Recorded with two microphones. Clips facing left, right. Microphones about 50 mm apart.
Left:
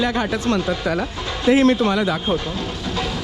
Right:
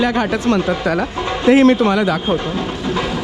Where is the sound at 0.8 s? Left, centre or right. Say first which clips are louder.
Right 4 dB; right.